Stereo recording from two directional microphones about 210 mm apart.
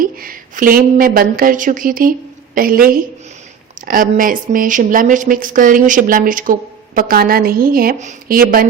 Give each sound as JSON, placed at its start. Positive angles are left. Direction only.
{"t": 0.0, "sound": "a woman's voice", "side_deg": -40}